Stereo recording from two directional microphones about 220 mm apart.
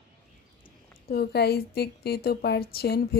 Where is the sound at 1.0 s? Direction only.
45° left (ahead or behind).